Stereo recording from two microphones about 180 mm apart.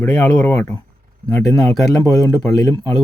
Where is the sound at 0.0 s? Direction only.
10° left (ahead or behind).